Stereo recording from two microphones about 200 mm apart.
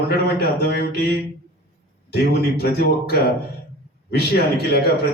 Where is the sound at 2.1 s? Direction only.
55° left (ahead or behind).